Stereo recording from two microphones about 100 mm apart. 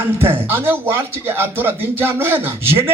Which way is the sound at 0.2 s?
20° right (ahead or behind).